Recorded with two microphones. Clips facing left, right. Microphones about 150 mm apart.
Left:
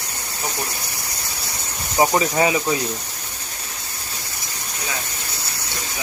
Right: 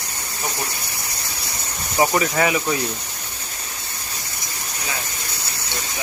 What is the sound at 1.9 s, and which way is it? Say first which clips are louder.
Speech: left 1 dB; 20° left (ahead or behind).